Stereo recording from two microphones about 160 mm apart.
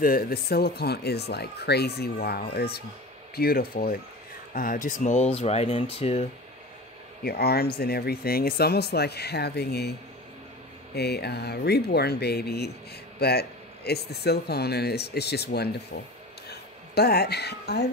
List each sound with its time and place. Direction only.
0.0 s speech: 65° left (ahead or behind); by 6.2 s 40° left (ahead or behind)
7.2 s speech: 75° left (ahead or behind)
11.0 s speech: 90° left
16.4 s a sound: 80° left